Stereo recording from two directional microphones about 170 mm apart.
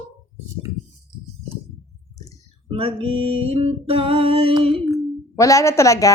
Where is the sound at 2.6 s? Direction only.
35° right (ahead or behind).